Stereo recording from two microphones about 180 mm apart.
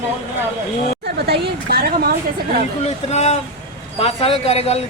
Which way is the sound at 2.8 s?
35° left (ahead or behind).